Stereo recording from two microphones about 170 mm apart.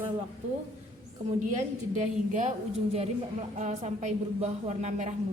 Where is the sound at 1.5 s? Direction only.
45° right (ahead or behind).